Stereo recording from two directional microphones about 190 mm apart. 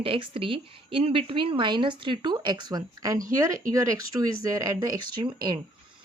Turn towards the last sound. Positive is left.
turn(degrees=-20)  # may be behind; listen again after turning